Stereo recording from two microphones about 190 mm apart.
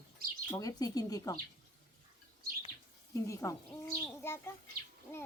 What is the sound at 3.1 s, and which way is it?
Speech, 15° left (ahead or behind).